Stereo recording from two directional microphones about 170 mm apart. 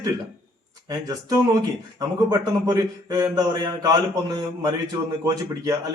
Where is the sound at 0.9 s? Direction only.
20° right (ahead or behind).